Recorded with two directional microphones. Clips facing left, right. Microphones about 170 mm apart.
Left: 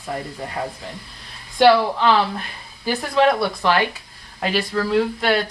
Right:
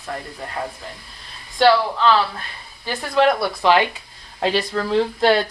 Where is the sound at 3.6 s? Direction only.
20° right (ahead or behind).